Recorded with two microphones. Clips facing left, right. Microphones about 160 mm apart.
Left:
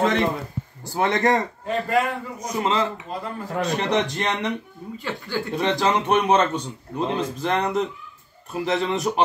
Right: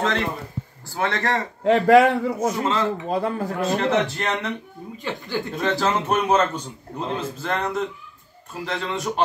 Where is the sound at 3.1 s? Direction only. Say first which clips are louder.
Right 7 dB; 80° right.